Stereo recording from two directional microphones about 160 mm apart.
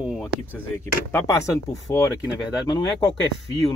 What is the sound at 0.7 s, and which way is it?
Speech, 15° left (ahead or behind).